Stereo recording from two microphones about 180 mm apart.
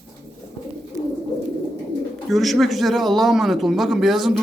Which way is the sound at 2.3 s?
Centre (ahead or behind).